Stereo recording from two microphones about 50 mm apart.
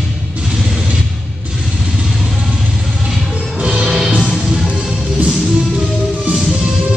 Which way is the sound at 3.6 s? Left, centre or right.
Centre.